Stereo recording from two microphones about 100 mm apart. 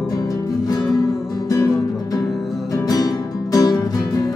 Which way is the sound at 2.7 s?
35° left (ahead or behind).